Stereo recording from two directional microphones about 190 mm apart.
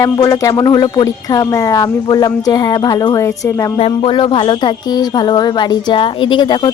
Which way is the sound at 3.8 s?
30° left (ahead or behind).